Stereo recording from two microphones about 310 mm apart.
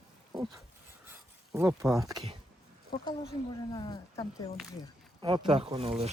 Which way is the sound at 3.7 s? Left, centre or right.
Centre.